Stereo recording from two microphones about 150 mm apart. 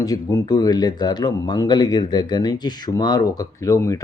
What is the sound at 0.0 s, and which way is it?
Speech, 25° left (ahead or behind).